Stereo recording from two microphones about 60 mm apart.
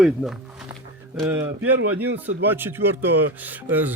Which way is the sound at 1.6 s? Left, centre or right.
Right.